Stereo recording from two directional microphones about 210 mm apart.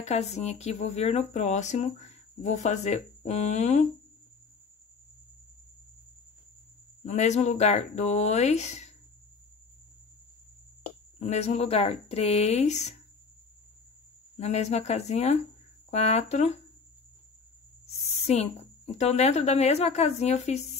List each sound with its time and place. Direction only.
0.0 s speech: 30° left (ahead or behind)
7.1 s speech: 35° left (ahead or behind)
11.1 s speech: 30° left (ahead or behind)
14.3 s speech: 30° left (ahead or behind)
18.1 s speech: 30° left (ahead or behind)